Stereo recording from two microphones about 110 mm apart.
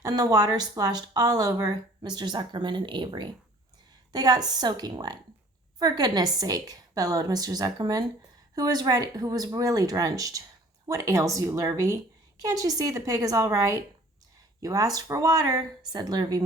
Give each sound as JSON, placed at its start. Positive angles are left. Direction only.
{"t": 0.0, "sound": "speech", "side_deg": -35}